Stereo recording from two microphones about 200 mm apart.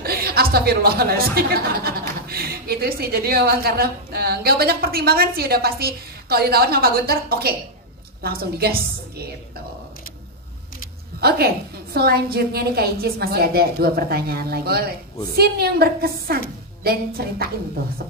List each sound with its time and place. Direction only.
0.0 s speech: 50° right (ahead or behind)
11.1 s speech: 50° right (ahead or behind)